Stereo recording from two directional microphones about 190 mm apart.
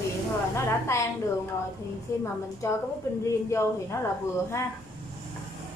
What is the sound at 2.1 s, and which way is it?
A woman's voice, 15° left (ahead or behind).